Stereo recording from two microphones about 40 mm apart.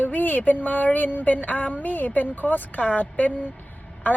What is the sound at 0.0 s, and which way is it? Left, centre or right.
A woman's voice, left.